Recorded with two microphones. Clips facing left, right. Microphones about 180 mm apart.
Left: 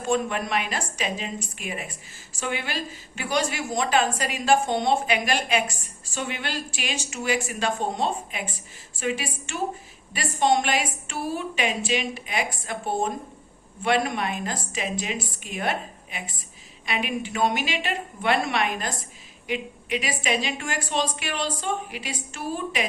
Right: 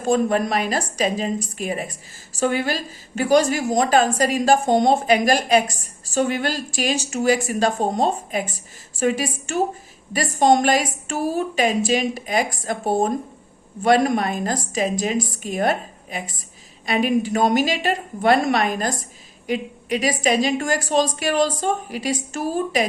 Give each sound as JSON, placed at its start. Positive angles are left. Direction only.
{"t": 0.0, "sound": "a woman's voice", "side_deg": -40}